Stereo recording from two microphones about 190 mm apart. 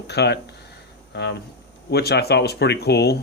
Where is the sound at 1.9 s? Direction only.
60° left (ahead or behind).